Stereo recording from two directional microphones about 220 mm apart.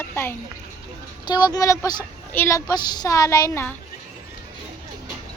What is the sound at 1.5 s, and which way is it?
A woman's voice, 15° left (ahead or behind).